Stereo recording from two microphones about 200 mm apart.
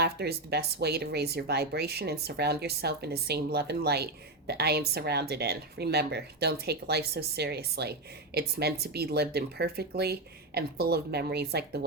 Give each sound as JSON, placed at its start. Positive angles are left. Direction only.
{"t": 0.0, "sound": "speech", "side_deg": -55}